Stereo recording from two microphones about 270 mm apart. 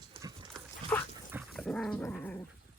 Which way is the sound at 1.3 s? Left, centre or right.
Centre.